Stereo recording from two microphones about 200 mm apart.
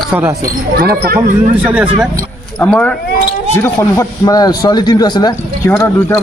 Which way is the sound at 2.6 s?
5° left (ahead or behind).